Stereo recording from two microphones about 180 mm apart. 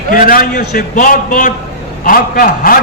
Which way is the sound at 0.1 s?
50° left (ahead or behind).